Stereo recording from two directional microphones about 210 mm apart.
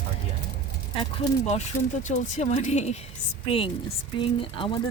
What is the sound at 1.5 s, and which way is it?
A woman's voice, 35° left (ahead or behind).